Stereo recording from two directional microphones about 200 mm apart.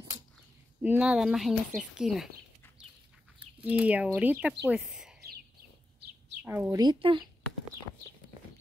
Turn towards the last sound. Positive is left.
turn(degrees=-25)  # may be behind; listen again after turning